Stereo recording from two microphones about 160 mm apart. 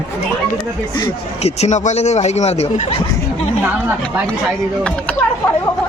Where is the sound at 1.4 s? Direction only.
40° left (ahead or behind).